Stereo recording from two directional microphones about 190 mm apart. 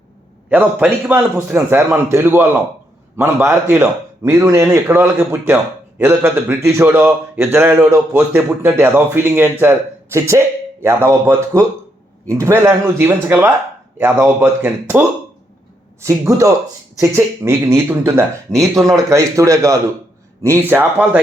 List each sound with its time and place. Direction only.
0.5 s a man's voice: 10° right (ahead or behind)